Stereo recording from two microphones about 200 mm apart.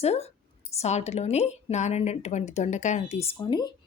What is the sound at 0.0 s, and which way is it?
Speech, 30° left (ahead or behind).